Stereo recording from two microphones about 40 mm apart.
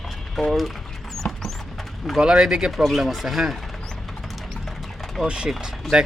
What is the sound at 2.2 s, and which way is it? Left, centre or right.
Speech, centre.